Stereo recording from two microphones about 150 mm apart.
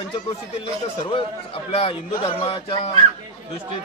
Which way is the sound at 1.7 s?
40° left (ahead or behind).